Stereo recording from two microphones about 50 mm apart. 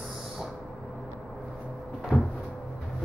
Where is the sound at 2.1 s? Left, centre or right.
Left.